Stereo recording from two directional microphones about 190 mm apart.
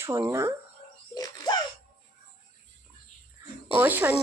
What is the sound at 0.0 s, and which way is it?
Speech, 15° right (ahead or behind).